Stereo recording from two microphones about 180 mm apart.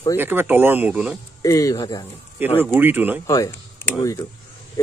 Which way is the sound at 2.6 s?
10° right (ahead or behind).